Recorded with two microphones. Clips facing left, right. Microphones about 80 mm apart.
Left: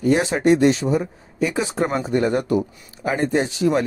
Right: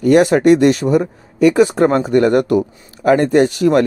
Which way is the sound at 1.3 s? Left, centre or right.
Right.